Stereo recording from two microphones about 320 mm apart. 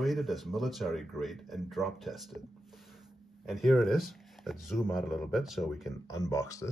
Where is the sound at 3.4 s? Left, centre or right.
Centre.